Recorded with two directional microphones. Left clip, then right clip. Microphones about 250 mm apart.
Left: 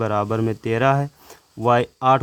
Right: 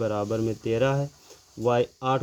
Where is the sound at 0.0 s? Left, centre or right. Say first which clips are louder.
Left 5 dB; left.